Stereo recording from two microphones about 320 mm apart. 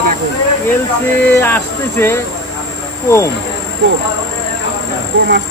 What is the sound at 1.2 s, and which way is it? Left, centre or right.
Speech, centre.